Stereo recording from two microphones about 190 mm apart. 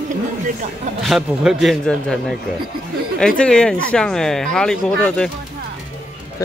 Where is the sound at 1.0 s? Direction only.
Centre (ahead or behind).